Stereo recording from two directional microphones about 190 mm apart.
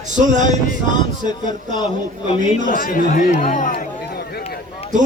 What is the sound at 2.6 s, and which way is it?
Speech, 45° left (ahead or behind).